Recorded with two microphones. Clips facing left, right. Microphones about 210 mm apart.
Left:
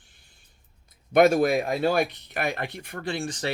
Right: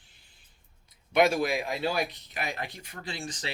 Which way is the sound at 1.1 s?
45° left (ahead or behind).